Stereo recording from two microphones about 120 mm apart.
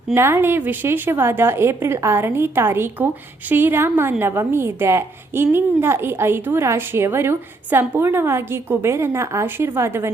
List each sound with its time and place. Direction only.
0.1 s a woman's voice: 20° right (ahead or behind)